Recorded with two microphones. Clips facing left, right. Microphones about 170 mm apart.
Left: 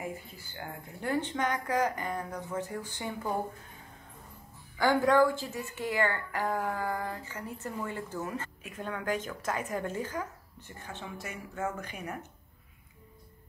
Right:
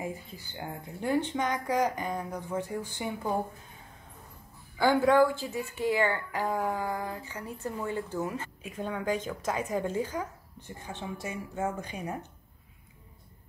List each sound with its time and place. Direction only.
0.0 s speech: 20° right (ahead or behind)
4.7 s a woman's voice: 10° right (ahead or behind)